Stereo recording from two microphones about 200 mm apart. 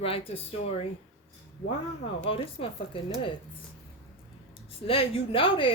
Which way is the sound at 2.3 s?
30° left (ahead or behind).